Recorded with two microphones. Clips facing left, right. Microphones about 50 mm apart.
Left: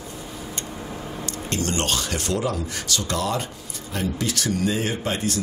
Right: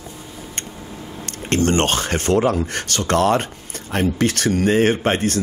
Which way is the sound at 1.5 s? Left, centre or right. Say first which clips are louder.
Right 8 dB; right.